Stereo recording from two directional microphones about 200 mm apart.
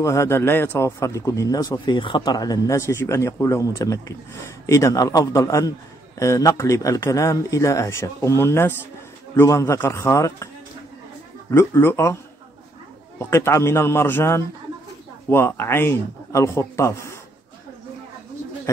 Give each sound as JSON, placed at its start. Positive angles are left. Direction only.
{"t": 0.0, "sound": "speech", "side_deg": 15}
{"t": 11.5, "sound": "speech", "side_deg": 10}
{"t": 13.2, "sound": "speech", "side_deg": 15}